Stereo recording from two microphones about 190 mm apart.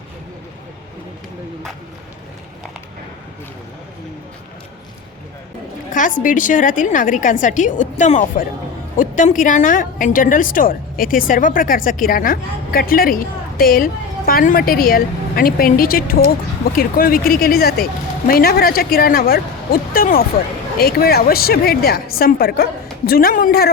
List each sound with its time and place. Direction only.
5.9 s a woman's voice: 45° left (ahead or behind)